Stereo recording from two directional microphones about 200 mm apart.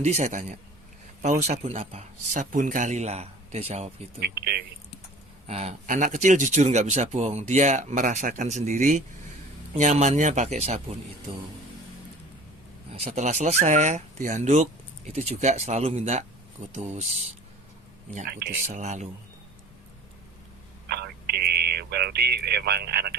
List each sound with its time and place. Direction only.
0.0 s speech: 35° right (ahead or behind)
4.2 s speech: 50° right (ahead or behind)
5.5 s speech: 35° right (ahead or behind)
12.9 s speech: 35° right (ahead or behind)
18.3 s speech: 55° right (ahead or behind)
18.7 s speech: 35° right (ahead or behind)
20.8 s a sound: 55° right (ahead or behind)